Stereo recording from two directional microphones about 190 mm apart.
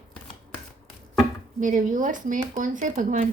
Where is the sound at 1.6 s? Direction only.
45° right (ahead or behind).